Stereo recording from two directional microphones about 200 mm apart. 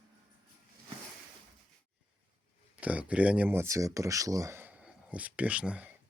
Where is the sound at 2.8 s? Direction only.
5° right (ahead or behind).